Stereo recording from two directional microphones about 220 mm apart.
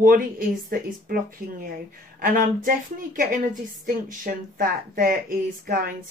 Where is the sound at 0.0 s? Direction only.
40° right (ahead or behind).